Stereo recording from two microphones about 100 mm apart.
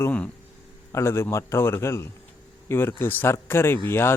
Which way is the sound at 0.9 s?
25° left (ahead or behind).